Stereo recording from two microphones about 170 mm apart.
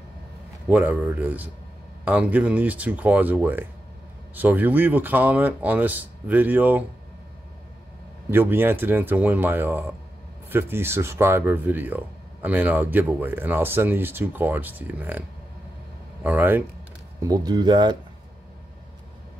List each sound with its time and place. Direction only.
0.7 s speech: 10° right (ahead or behind)
8.3 s speech: 10° right (ahead or behind)
17.2 s speech: 20° right (ahead or behind)